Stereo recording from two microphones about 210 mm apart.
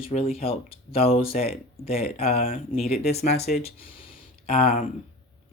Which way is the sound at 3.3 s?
50° left (ahead or behind).